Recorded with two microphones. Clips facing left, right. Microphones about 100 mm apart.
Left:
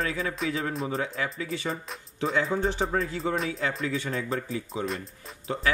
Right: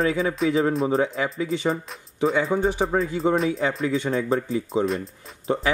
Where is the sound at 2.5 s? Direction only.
5° right (ahead or behind).